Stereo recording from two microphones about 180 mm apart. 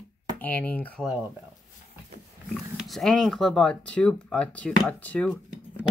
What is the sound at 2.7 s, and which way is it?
Speech, centre (ahead or behind).